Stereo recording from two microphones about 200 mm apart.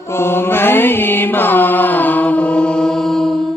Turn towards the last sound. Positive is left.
turn(degrees=5)  # may be behind; listen again after turning